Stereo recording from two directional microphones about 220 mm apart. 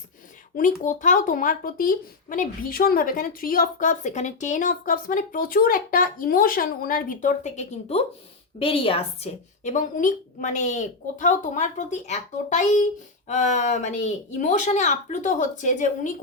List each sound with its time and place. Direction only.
0.5 s a woman's voice: 35° left (ahead or behind)